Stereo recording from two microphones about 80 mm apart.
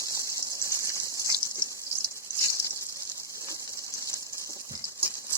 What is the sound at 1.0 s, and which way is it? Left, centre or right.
Gush, right.